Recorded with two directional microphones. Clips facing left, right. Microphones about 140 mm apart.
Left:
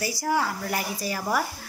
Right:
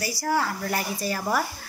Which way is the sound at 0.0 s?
20° left (ahead or behind).